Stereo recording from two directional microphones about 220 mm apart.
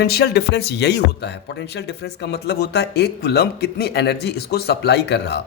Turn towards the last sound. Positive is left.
turn(degrees=50)  # may be behind; listen again after turning